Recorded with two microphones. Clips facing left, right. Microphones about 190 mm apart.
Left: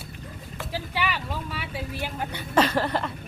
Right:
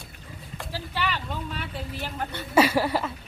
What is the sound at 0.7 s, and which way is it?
Speech, 10° left (ahead or behind).